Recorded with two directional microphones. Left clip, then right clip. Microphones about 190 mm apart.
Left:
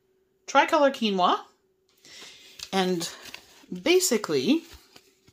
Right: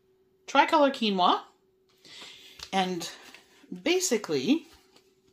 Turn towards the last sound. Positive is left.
turn(degrees=40)  # may be behind; listen again after turning